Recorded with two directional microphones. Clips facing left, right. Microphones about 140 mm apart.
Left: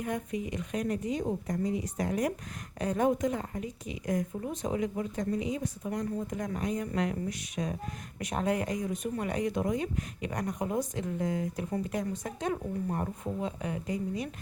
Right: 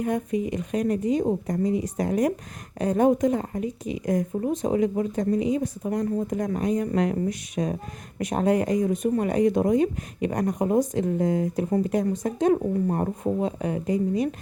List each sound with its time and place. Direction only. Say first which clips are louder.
0.0 s speech: right 8 dB; 40° right (ahead or behind)